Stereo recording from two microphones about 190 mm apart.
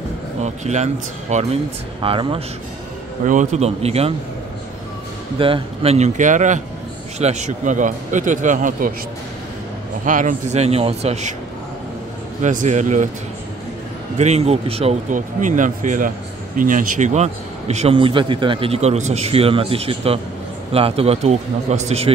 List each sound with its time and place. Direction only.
0.4 s a man's voice: 35° right (ahead or behind)
3.3 s a man's voice: 40° right (ahead or behind)
5.4 s a man's voice: 30° right (ahead or behind)
10.0 s a man's voice: 45° right (ahead or behind)
12.4 s a man's voice: 40° right (ahead or behind)
14.1 s a man's voice: 35° right (ahead or behind)